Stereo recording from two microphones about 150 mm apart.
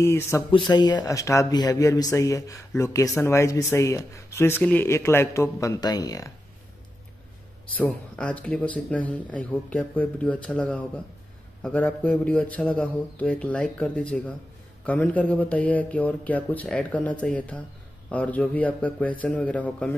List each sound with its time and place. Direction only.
0.0 s speech: 15° left (ahead or behind)
0.5 s speech: 30° left (ahead or behind)
7.7 s speech: 10° left (ahead or behind)